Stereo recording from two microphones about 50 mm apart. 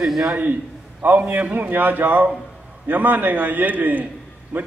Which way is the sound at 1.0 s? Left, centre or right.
Right.